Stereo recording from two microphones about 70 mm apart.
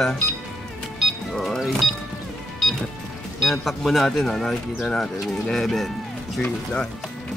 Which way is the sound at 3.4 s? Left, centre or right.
Centre.